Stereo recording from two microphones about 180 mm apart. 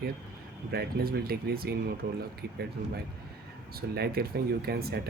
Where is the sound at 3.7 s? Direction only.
60° right (ahead or behind).